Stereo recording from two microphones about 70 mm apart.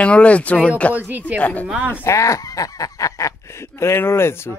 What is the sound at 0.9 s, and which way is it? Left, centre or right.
Speech, right.